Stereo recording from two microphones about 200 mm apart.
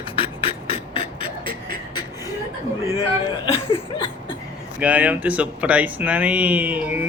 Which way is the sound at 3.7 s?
25° left (ahead or behind).